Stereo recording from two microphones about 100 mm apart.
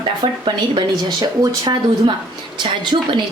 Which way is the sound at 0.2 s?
50° right (ahead or behind).